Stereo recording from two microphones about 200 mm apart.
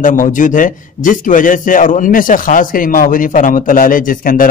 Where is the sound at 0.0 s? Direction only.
40° left (ahead or behind).